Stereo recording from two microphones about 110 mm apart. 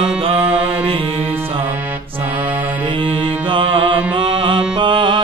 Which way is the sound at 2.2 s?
15° right (ahead or behind).